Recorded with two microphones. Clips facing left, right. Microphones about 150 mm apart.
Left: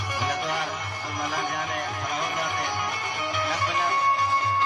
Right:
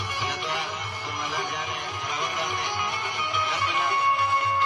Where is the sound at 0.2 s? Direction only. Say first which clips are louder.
Left 4 dB; 50° left (ahead or behind).